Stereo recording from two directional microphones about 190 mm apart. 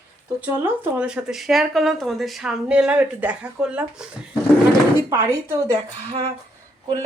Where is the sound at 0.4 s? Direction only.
5° right (ahead or behind).